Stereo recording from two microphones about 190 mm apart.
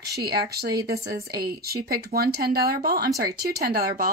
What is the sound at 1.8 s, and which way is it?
Speech, 55° right (ahead or behind).